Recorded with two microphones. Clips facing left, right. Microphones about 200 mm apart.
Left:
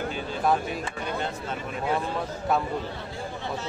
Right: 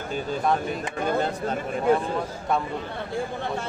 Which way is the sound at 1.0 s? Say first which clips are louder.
Right 9 dB; 45° right (ahead or behind).